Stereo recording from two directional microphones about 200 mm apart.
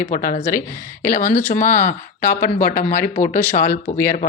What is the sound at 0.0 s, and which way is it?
Speech, 45° left (ahead or behind).